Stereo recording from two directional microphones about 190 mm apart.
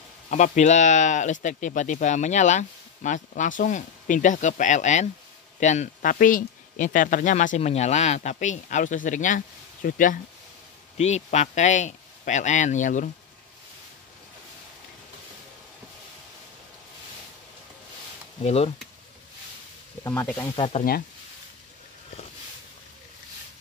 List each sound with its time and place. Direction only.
0.3 s speech: 40° left (ahead or behind)
18.4 s speech: 35° left (ahead or behind)
20.0 s speech: 15° left (ahead or behind)
20.5 s speech: 30° left (ahead or behind)